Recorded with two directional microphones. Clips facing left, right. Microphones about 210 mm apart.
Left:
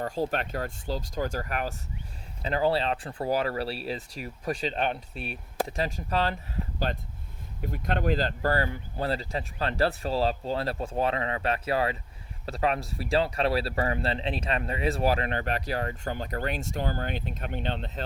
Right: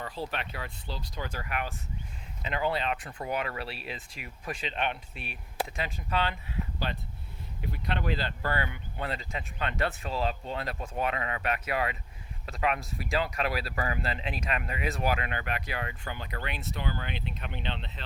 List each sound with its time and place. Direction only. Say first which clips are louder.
0.0 s speech: left 7 dB; 45° left (ahead or behind)